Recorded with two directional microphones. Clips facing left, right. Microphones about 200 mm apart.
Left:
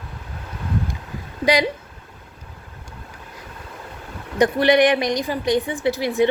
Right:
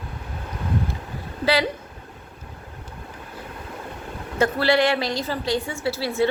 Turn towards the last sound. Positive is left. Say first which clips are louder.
# left 3 dB
turn(degrees=15)  # may be behind; listen again after turning